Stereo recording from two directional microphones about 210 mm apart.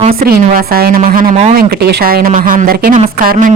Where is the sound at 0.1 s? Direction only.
45° right (ahead or behind).